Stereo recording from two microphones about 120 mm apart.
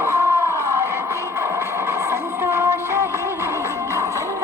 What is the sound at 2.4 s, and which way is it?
Music, 20° right (ahead or behind).